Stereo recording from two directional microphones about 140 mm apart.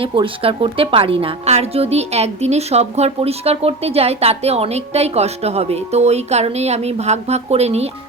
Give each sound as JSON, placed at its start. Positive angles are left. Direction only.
{"t": 0.0, "sound": "a woman's voice", "side_deg": -40}